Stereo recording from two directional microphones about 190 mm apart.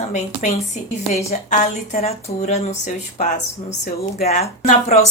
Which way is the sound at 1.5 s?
35° left (ahead or behind).